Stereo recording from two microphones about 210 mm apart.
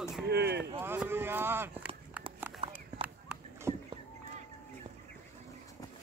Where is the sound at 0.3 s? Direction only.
50° right (ahead or behind).